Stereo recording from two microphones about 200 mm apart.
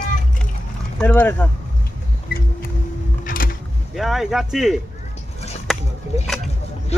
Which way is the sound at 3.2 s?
45° left (ahead or behind).